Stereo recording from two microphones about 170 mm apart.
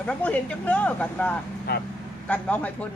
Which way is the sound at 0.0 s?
10° left (ahead or behind).